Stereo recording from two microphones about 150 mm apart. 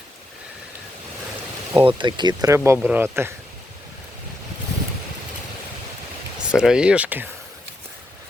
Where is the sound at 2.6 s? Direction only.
10° right (ahead or behind).